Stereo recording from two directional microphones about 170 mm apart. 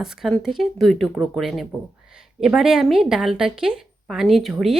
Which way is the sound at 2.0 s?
5° right (ahead or behind).